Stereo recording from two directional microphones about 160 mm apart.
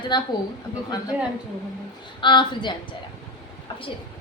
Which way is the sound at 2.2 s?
30° left (ahead or behind).